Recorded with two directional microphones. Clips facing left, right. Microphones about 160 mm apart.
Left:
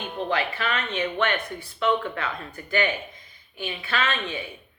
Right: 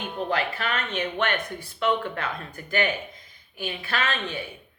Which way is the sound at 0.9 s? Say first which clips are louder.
Left 1 dB; 45° right (ahead or behind).